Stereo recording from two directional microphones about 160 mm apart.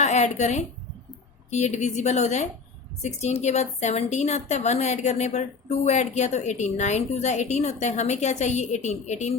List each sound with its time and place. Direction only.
0.0 s a woman's voice: 45° left (ahead or behind)